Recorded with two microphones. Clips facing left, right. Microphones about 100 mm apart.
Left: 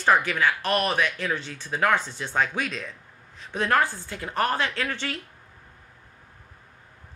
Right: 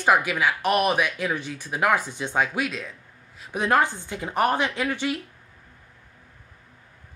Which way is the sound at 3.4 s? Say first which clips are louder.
Right 2 dB; 15° right (ahead or behind).